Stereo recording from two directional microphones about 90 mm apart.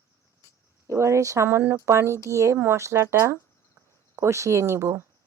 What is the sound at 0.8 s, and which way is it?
Speech, 35° right (ahead or behind).